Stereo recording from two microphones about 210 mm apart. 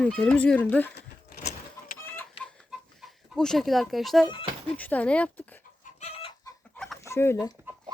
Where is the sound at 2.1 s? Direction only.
Centre (ahead or behind).